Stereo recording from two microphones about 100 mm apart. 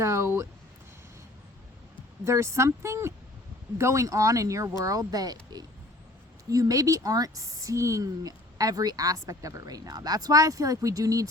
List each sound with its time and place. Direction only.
0.0 s speech: 30° right (ahead or behind)
2.2 s speech: 30° right (ahead or behind)